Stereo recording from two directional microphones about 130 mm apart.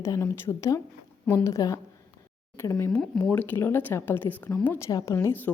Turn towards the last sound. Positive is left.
turn(degrees=20)  # may be behind; listen again after turning